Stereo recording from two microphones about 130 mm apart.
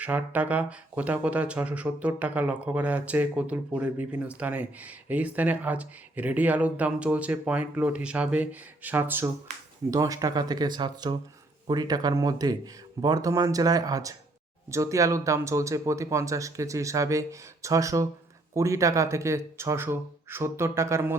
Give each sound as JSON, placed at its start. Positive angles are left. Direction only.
{"t": 0.0, "sound": "speech", "side_deg": -10}
{"t": 9.9, "sound": "speech", "side_deg": -30}